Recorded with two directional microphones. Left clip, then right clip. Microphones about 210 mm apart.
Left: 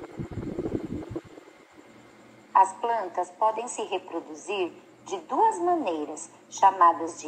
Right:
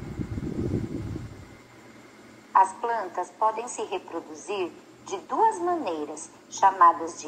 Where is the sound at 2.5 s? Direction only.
40° left (ahead or behind).